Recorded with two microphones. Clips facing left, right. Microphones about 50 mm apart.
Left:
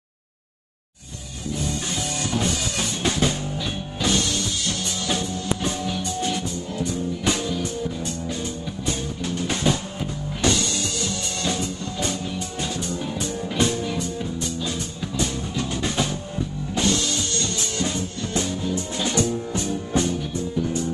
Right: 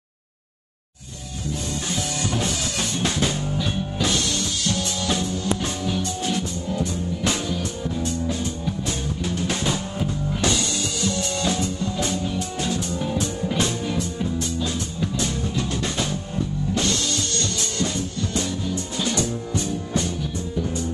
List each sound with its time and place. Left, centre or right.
2.8 s music: centre; by 20.1 s left